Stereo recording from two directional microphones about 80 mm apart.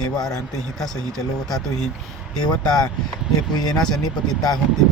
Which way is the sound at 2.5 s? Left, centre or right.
Left.